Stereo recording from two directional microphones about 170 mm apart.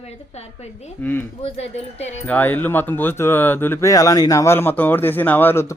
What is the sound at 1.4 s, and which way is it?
Speech, 40° left (ahead or behind).